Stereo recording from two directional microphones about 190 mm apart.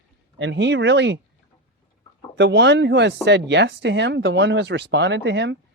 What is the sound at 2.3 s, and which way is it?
Speech, 70° right (ahead or behind).